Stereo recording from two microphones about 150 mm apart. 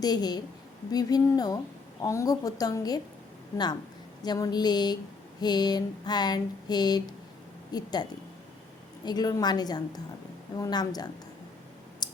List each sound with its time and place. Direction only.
0.0 s a woman's voice: 25° left (ahead or behind)
4.2 s a woman's voice: 25° left (ahead or behind)
9.0 s a woman's voice: 25° left (ahead or behind)
12.0 s a sound: 30° left (ahead or behind)